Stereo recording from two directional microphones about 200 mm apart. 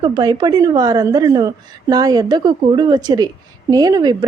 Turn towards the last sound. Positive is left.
turn(degrees=-20)  # may be behind; listen again after turning